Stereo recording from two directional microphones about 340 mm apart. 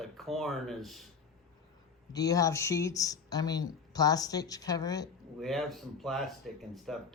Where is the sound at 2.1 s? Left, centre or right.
Centre.